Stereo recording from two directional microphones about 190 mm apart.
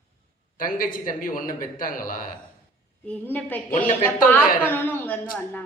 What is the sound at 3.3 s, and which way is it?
A woman's voice, 10° left (ahead or behind).